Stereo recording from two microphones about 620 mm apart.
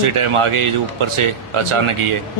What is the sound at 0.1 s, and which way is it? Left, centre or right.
A man's voice, right.